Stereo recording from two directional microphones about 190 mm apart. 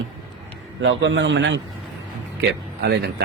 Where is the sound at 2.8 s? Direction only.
65° right (ahead or behind).